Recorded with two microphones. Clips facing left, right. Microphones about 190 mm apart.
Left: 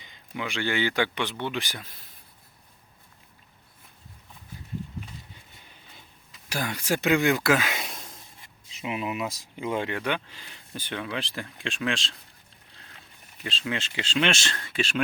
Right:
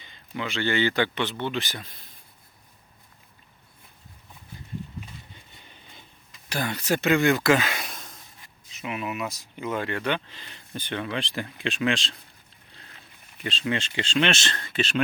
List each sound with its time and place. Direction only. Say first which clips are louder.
0.0 s speech: right 1 dB; 15° left (ahead or behind)
5.6 s vehicle: right 2 dB; 5° left (ahead or behind)
6.5 s speech: right 2 dB; 10° left (ahead or behind)
7.9 s a sound: left 1 dB; 25° left (ahead or behind)
8.8 s speech: left 1 dB; 25° left (ahead or behind); by 12.1 s centre (ahead or behind)
13.4 s speech: right 3 dB; centre (ahead or behind)